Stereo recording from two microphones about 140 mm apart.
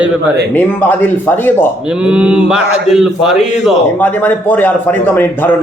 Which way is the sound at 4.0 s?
15° left (ahead or behind).